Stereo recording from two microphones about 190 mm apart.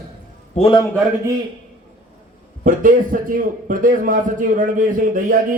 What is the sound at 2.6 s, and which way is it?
A man's voice, 45° right (ahead or behind).